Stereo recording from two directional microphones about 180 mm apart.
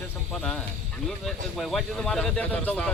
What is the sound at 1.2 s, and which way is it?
Speech, centre (ahead or behind).